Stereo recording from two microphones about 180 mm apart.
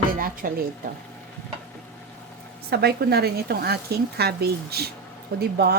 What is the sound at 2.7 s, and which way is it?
Speech, 60° right (ahead or behind).